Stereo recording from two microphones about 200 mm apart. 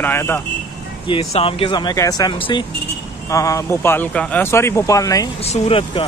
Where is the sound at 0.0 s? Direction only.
10° left (ahead or behind).